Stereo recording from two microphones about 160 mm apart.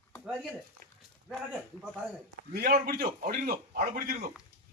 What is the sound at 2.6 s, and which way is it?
Speech, 65° right (ahead or behind).